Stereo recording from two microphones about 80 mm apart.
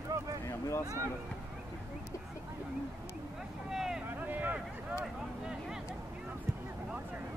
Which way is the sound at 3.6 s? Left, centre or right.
Centre.